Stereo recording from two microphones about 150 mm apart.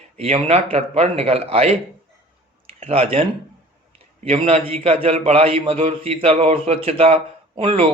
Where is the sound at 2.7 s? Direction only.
40° right (ahead or behind).